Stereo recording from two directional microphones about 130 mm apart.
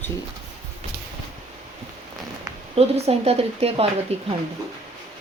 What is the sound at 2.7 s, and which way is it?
Speech, 50° right (ahead or behind).